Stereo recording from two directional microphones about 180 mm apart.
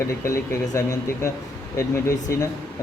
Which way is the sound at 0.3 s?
15° left (ahead or behind).